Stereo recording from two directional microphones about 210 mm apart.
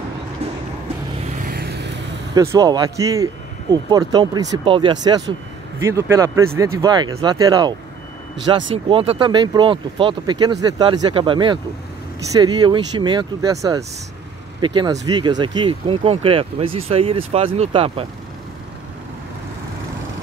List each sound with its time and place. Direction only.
1.3 s vehicle: 40° right (ahead or behind)
2.3 s speech: 15° right (ahead or behind)
5.8 s speech: 15° right (ahead or behind)